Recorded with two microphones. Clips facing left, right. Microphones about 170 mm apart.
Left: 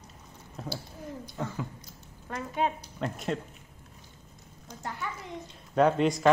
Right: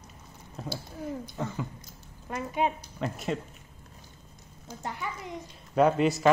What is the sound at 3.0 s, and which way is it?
Speech, 5° right (ahead or behind).